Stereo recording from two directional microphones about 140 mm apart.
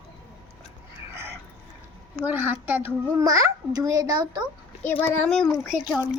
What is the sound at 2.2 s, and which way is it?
A child's voice, 15° right (ahead or behind).